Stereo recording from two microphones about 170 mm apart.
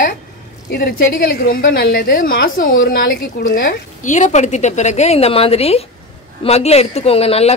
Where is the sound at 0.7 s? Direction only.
70° left (ahead or behind).